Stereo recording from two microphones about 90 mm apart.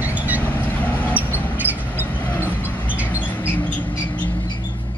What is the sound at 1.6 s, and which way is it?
Vehicle, 20° right (ahead or behind).